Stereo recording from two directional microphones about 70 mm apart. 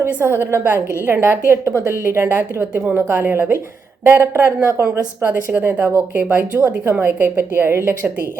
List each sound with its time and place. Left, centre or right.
0.1 s a woman's voice: right